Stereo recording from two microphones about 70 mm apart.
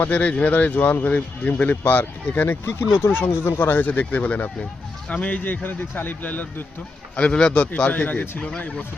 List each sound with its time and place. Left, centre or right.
0.0 s speech: left
7.2 s a man's voice: centre